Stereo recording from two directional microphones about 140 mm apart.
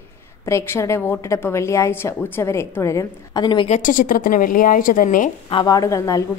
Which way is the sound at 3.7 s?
70° left (ahead or behind).